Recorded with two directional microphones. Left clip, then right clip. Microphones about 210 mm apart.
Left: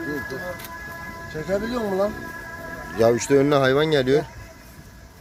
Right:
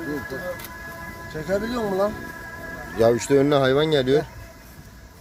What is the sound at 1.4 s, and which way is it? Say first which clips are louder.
Speech: even; 10° left (ahead or behind).